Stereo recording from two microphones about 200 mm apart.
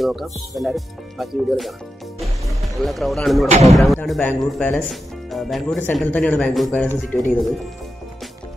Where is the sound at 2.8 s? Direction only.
Centre (ahead or behind).